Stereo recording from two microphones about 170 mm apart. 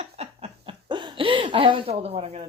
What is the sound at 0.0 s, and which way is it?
Laughter, 35° right (ahead or behind).